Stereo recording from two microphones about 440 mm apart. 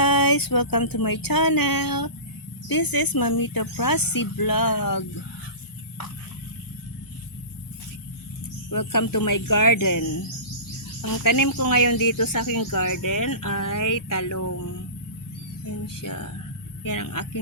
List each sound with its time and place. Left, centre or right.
0.0 s a sound: left
2.6 s speech: left
8.7 s speech: left
16.0 s speech: left